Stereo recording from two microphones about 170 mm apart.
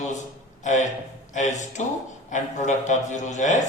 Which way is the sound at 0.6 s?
45° left (ahead or behind).